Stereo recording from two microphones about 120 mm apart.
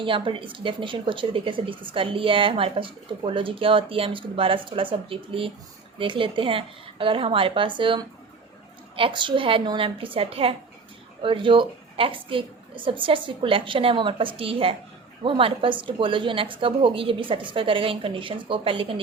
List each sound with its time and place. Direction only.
0.0 s a woman's voice: 45° right (ahead or behind)